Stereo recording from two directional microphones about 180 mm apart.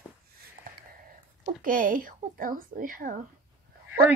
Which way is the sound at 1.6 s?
50° right (ahead or behind).